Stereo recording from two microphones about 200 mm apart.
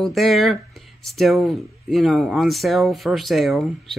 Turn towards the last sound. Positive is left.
turn(degrees=0)  # may be behind; listen again after turning